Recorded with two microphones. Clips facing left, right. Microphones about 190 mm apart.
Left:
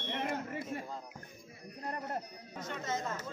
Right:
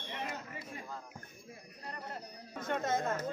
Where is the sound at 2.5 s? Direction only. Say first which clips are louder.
Right 4 dB; 55° right (ahead or behind).